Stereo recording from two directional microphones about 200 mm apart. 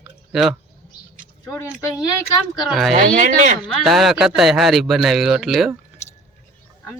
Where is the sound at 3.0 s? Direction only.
40° right (ahead or behind).